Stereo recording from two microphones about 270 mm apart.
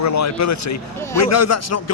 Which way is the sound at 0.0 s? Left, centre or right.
Left.